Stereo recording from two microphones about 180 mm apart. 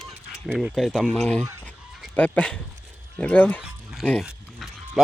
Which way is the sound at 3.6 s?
Centre (ahead or behind).